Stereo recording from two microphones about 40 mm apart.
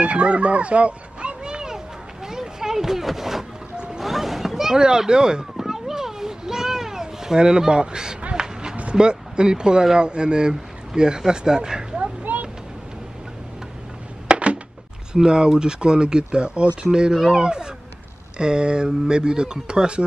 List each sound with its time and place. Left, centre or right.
0.0 s a sound: right; by 3.4 s centre
3.7 s music: right
4.0 s boat: centre
4.7 s children playing: centre
7.3 s speech: centre
8.4 s run: right
8.9 s speech: right
12.0 s a sound: right
14.2 s a sound: right
15.1 s speech: right